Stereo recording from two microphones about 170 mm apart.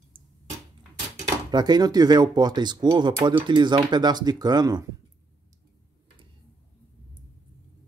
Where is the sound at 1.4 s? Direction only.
25° right (ahead or behind).